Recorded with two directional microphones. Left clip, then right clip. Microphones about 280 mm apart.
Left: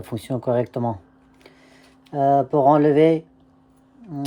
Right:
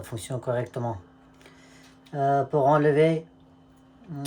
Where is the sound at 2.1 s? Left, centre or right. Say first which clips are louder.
Left 6 dB; left.